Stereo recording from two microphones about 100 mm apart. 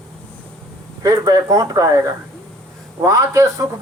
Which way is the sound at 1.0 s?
35° right (ahead or behind).